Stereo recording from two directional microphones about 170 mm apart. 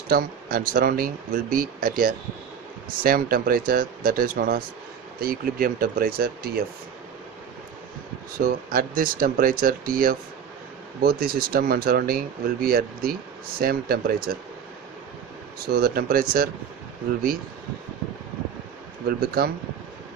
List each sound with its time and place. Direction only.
0.1 s speech: 60° right (ahead or behind)
8.5 s speech: 55° right (ahead or behind)
15.6 s speech: 65° right (ahead or behind)
19.0 s speech: 65° right (ahead or behind)